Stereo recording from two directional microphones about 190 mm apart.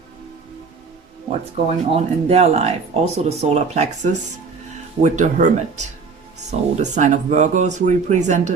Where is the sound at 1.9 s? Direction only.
30° right (ahead or behind).